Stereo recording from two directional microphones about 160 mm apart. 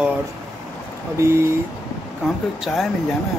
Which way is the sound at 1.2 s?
15° right (ahead or behind).